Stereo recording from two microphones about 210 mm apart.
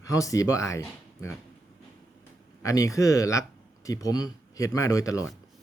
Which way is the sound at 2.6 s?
15° left (ahead or behind).